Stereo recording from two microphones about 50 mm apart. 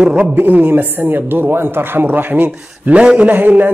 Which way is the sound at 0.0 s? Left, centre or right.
Centre.